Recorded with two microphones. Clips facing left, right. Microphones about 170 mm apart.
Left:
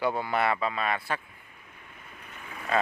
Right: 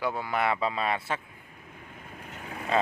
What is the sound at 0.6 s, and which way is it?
Speech, 30° right (ahead or behind).